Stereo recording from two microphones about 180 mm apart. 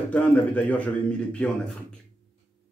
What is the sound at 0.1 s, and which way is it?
A man's voice, 10° left (ahead or behind).